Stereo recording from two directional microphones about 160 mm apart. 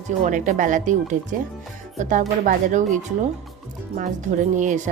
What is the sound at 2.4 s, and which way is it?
Speech, 50° right (ahead or behind).